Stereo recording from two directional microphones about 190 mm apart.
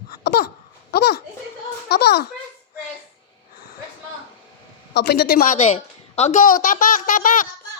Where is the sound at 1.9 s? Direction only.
55° left (ahead or behind).